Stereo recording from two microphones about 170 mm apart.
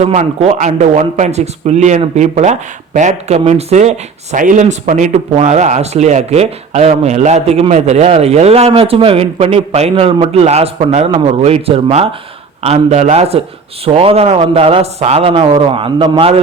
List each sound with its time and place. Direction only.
0.0 s speech: 40° right (ahead or behind)